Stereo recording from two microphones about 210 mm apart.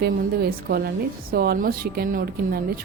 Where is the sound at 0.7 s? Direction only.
45° right (ahead or behind).